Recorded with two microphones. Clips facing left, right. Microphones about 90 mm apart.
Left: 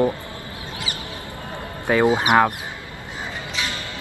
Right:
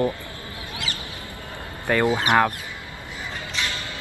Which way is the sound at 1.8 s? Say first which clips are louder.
Left 3 dB; 20° left (ahead or behind).